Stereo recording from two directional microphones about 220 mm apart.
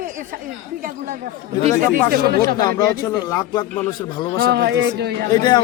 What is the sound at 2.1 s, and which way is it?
Speech, 45° right (ahead or behind).